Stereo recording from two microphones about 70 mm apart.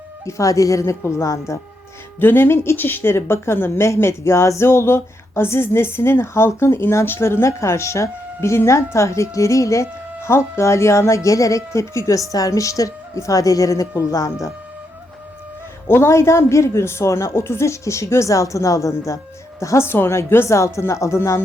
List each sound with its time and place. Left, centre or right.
0.3 s speech: left
2.1 s speech: left
15.9 s speech: left